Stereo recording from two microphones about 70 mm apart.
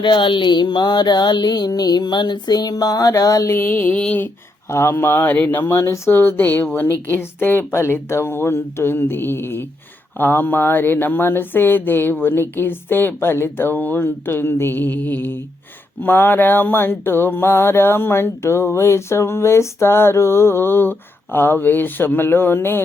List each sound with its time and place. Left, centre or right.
0.1 s a sound: left
3.5 s speech: left
4.7 s mantra: left
6.1 s speech: left
7.1 s mantra: left